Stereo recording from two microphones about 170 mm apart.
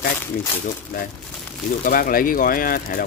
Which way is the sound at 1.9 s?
55° left (ahead or behind).